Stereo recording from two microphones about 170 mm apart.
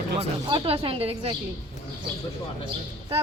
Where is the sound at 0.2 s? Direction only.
35° right (ahead or behind).